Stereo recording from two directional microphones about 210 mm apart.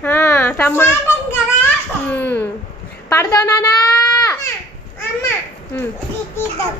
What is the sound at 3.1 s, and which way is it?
Baby cry, 15° left (ahead or behind).